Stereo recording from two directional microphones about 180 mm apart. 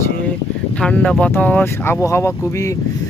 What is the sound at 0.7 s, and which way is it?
Speech, 5° left (ahead or behind).